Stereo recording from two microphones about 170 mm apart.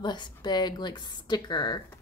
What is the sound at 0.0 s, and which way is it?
A woman's voice, 25° left (ahead or behind).